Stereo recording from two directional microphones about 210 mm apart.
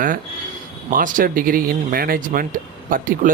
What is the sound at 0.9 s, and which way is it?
Speech, 40° right (ahead or behind).